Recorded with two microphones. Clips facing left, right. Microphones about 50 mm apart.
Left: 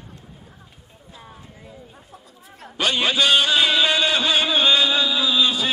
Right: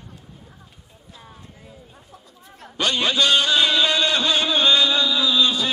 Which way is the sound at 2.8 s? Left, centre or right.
Centre.